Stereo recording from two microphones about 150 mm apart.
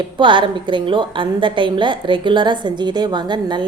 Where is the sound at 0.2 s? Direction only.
35° right (ahead or behind).